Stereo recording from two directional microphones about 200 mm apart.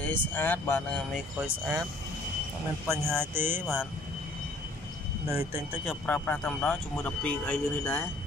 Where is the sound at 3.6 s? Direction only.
5° left (ahead or behind).